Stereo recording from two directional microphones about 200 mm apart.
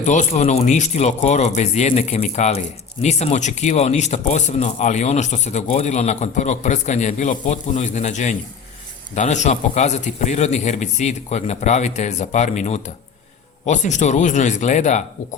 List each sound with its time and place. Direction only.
0.0 s speech: 35° left (ahead or behind)